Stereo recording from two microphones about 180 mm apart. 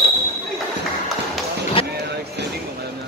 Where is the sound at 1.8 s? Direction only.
30° left (ahead or behind).